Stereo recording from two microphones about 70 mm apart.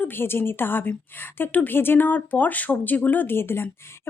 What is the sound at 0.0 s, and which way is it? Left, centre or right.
A woman's voice, left.